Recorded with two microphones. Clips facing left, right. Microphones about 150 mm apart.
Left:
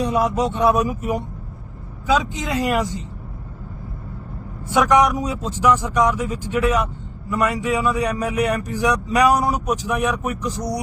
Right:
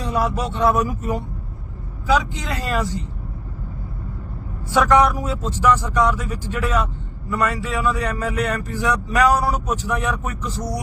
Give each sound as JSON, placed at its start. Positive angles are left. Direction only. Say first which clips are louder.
{"t": 0.0, "sound": "speech", "louder": "left 3 dB", "side_deg": 20}
{"t": 4.7, "sound": "speech", "louder": "even", "side_deg": 15}